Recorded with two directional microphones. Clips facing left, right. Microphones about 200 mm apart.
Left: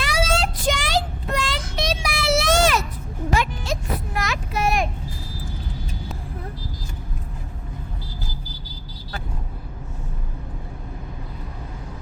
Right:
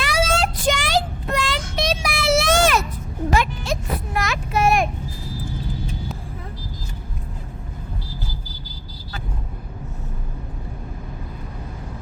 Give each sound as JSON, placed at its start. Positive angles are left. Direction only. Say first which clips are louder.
{"t": 0.0, "sound": "child singing", "louder": "right 2 dB", "side_deg": -55}
{"t": 3.3, "sound": "music", "louder": "right 2 dB", "side_deg": -60}
{"t": 4.2, "sound": "vehicle", "louder": "right 5 dB", "side_deg": -55}